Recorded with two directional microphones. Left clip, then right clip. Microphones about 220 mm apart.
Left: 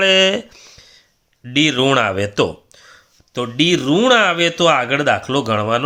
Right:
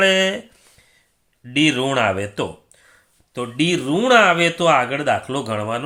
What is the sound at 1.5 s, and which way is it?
Speech, 35° left (ahead or behind).